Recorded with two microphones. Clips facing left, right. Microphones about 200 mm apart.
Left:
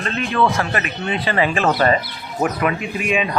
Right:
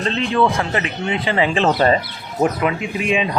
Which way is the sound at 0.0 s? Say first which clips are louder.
Right 2 dB; 20° right (ahead or behind).